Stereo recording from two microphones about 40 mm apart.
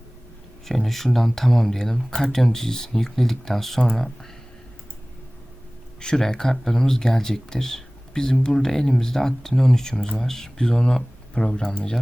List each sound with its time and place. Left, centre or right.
0.6 s speech: centre
6.0 s speech: centre